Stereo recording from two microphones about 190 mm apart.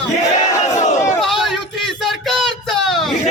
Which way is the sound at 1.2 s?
Centre (ahead or behind).